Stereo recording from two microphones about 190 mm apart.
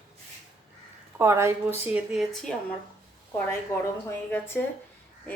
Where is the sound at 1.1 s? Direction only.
15° right (ahead or behind).